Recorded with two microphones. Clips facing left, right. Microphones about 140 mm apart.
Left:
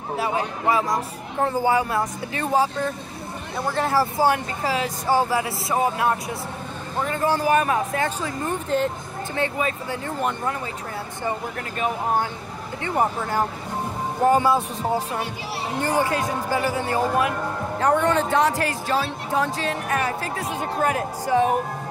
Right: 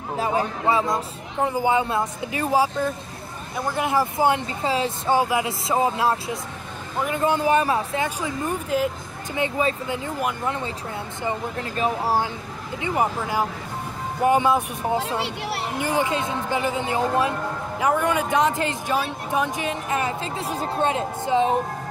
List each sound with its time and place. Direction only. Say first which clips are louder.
0.3 s speech: right 1 dB; 25° right (ahead or behind)
1.4 s speech: even; 15° right (ahead or behind)
2.3 s speech: right 1 dB; 10° right (ahead or behind); by 6.3 s 25° right (ahead or behind)
7.0 s speech: right 1 dB; 15° right (ahead or behind)
8.0 s speech: even; 15° right (ahead or behind)
12.8 s speech: even; 10° right (ahead or behind)
17.7 s speech: left 2 dB; 10° right (ahead or behind)
20.4 s speech: right 2 dB; 35° right (ahead or behind)
20.8 s speech: even; 25° right (ahead or behind)